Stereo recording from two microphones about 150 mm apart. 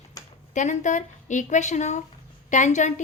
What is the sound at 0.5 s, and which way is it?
A woman's voice, 55° left (ahead or behind).